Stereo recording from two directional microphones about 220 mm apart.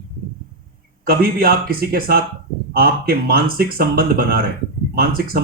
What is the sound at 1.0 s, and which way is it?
Speech, 40° right (ahead or behind).